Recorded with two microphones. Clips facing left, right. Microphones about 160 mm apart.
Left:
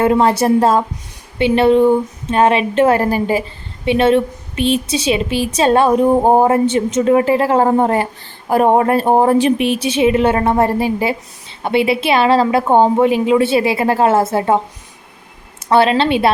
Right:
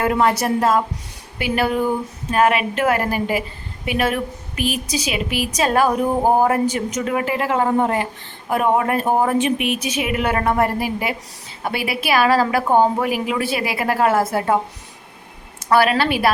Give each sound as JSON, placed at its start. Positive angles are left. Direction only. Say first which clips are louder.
{"t": 0.0, "sound": "a woman's voice", "louder": "left 5 dB", "side_deg": 30}
{"t": 15.7, "sound": "a woman's voice", "louder": "left 4 dB", "side_deg": 25}